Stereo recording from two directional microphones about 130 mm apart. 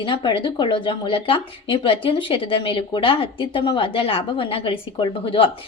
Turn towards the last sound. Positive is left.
turn(degrees=40)  # may be behind; listen again after turning